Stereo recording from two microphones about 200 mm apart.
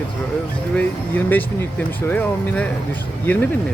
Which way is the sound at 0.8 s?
10° left (ahead or behind).